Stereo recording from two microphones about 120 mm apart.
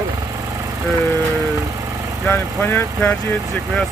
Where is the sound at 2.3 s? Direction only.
15° left (ahead or behind).